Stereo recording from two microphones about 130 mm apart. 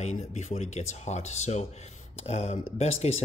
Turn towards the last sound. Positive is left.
turn(degrees=55)  # may be behind; listen again after turning